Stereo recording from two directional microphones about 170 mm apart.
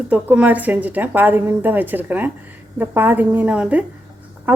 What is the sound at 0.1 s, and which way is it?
Speech, 10° right (ahead or behind).